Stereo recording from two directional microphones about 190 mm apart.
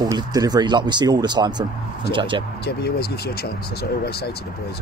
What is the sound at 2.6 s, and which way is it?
Speech, 55° left (ahead or behind).